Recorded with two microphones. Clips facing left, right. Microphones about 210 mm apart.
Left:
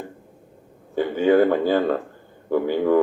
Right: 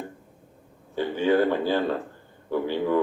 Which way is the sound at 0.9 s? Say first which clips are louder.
Left 5 dB; 50° left (ahead or behind).